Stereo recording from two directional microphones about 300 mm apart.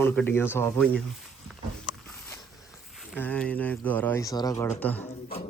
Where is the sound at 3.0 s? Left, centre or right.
Centre.